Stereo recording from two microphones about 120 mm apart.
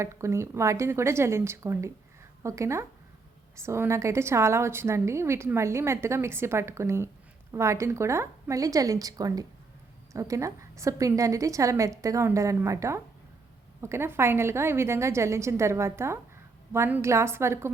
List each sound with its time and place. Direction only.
0.0 s a woman's voice: 25° right (ahead or behind)